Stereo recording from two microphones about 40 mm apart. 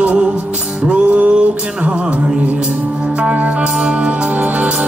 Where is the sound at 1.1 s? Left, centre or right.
Right.